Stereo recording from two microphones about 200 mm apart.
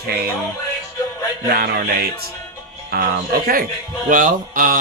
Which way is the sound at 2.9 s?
50° right (ahead or behind).